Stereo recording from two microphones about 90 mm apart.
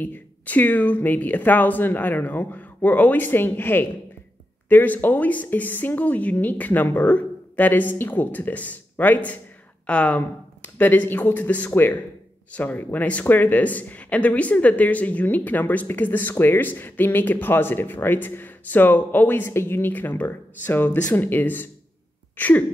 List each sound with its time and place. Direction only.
0.0 s speech: 20° left (ahead or behind)